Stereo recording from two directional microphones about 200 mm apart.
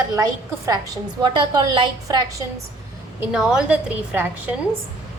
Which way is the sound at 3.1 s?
5° right (ahead or behind).